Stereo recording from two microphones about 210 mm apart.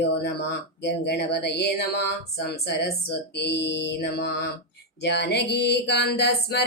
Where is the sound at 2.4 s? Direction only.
55° left (ahead or behind).